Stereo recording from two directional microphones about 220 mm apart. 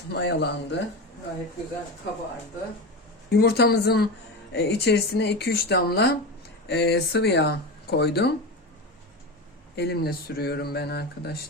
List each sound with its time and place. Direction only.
0.1 s speech: 50° left (ahead or behind)
3.2 s speech: 50° left (ahead or behind)
9.7 s speech: 45° left (ahead or behind)